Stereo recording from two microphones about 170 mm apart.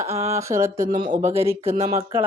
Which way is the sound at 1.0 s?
30° right (ahead or behind).